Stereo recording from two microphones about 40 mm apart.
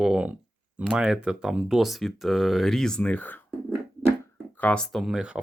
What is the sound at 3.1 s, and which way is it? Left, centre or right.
Speech, left.